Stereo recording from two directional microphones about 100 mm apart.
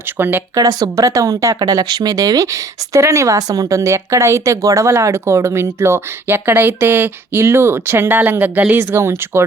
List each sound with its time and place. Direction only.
0.2 s speech: 20° right (ahead or behind)
0.5 s a woman's voice: 40° right (ahead or behind)